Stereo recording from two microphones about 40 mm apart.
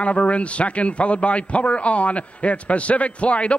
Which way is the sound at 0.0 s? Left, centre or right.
Left.